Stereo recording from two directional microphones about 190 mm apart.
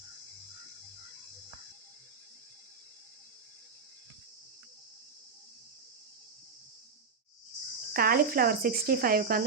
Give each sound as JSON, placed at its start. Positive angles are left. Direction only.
{"t": 7.9, "sound": "speech", "side_deg": -50}